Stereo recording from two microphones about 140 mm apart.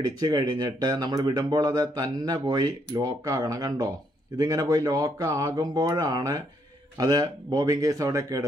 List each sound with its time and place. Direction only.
0.0 s speech: 30° right (ahead or behind)